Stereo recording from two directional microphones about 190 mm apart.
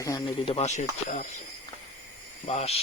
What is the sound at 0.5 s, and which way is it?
Speech, 35° left (ahead or behind).